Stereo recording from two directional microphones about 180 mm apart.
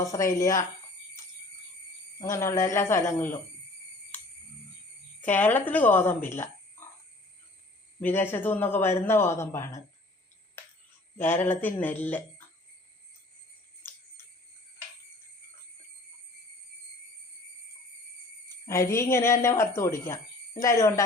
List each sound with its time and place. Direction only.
0.0 s a man's voice: 15° left (ahead or behind)
2.2 s a man's voice: 15° left (ahead or behind)
5.2 s speech: 10° left (ahead or behind)
8.0 s a man's voice: 10° left (ahead or behind)
11.2 s a man's voice: 10° left (ahead or behind)
18.4 s a woman's voice: 15° left (ahead or behind)